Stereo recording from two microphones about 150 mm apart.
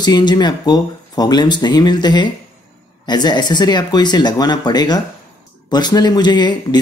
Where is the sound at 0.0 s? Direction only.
30° left (ahead or behind).